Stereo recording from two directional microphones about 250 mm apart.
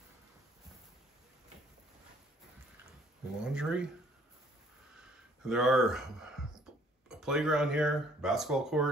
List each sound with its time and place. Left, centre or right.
3.4 s speech: centre
5.0 s a sound: centre
7.1 s speech: centre